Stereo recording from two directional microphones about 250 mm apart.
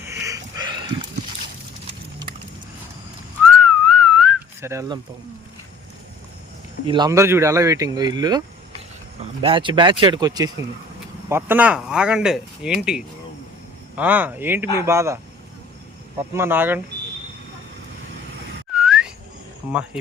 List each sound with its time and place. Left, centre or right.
0.0 s a sound: centre
3.5 s whistling: centre
6.8 s speech: centre
16.3 s speech: centre
18.8 s whistling: centre
19.6 s speech: centre